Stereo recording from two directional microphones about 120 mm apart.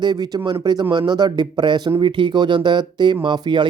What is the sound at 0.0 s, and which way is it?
Speech, 35° right (ahead or behind).